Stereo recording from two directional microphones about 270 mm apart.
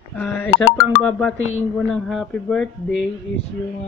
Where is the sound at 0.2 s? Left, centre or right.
Centre.